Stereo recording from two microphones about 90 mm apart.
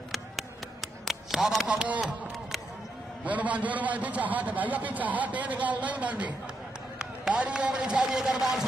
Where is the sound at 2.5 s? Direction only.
Centre (ahead or behind).